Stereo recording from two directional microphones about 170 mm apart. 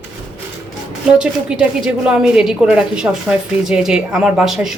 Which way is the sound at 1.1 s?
5° right (ahead or behind).